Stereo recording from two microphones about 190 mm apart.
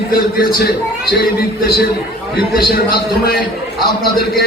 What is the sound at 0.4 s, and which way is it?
A man's voice, 50° left (ahead or behind).